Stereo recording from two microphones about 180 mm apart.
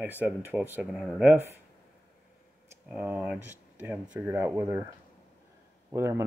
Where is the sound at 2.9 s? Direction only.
5° right (ahead or behind).